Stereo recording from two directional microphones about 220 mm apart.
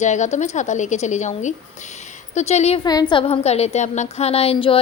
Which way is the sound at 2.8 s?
20° left (ahead or behind).